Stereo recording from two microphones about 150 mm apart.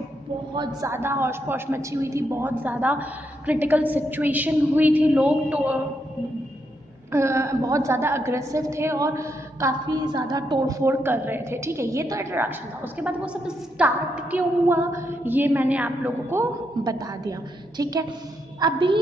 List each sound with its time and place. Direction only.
0.7 s a woman's voice: 15° right (ahead or behind)
7.1 s a woman's voice: 20° right (ahead or behind)